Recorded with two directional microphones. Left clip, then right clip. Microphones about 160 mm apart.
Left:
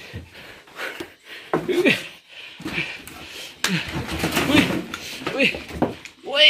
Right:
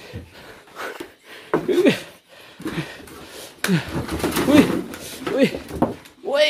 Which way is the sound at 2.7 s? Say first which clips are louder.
Left 6 dB; 60° right (ahead or behind).